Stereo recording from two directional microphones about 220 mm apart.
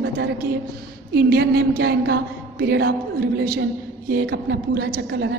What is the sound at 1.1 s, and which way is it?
A woman's voice, 45° right (ahead or behind).